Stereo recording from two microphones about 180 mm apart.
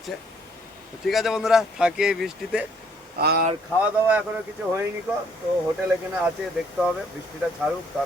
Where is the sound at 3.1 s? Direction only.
60° right (ahead or behind).